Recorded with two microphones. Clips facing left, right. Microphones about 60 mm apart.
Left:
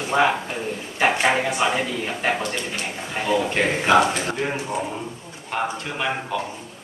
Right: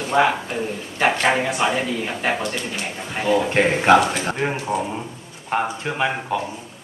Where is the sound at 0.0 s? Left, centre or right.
Centre.